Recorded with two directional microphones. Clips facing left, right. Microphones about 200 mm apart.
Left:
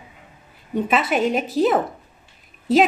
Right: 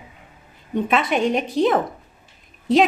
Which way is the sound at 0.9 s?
5° left (ahead or behind).